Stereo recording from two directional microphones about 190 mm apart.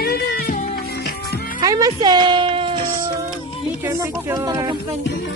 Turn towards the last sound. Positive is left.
turn(degrees=-20)  # may be behind; listen again after turning